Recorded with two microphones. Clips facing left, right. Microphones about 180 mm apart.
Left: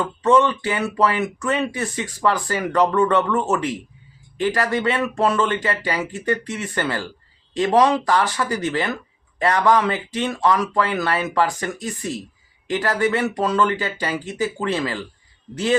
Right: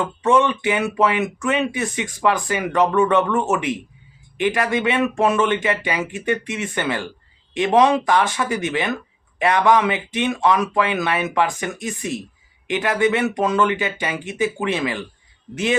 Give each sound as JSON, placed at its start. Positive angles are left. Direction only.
{"t": 0.0, "sound": "speech", "side_deg": -10}
{"t": 1.2, "sound": "speech", "side_deg": -10}